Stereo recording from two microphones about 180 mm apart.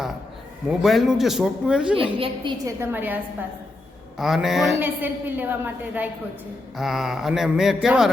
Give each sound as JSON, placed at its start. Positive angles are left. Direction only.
{"t": 0.7, "sound": "mantra", "side_deg": 0}
{"t": 2.0, "sound": "a woman's voice", "side_deg": -30}
{"t": 2.8, "sound": "a woman's voice", "side_deg": -10}
{"t": 4.2, "sound": "mantra", "side_deg": 0}
{"t": 4.8, "sound": "a woman's voice", "side_deg": -10}
{"t": 6.7, "sound": "mantra", "side_deg": 0}